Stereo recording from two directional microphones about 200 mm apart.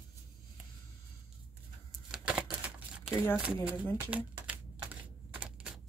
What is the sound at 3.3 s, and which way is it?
Speech, 5° right (ahead or behind).